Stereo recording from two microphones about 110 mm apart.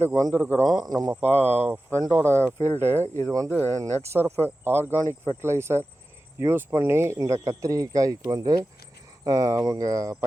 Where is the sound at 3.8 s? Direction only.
20° right (ahead or behind).